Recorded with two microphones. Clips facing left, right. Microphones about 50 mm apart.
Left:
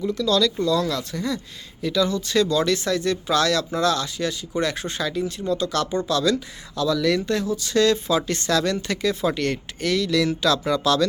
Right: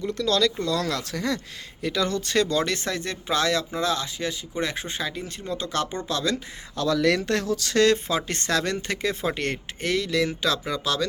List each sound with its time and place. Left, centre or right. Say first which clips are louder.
0.1 s speech: left 1 dB; right
1.1 s speech: even; right
1.8 s speech: left 3 dB; right; by 5.2 s centre
5.4 s speech: left 2 dB; right
6.8 s speech: left 1 dB; right
7.2 s speech: left 1 dB; right
7.8 s speech: left 1 dB; right; by 11.0 s centre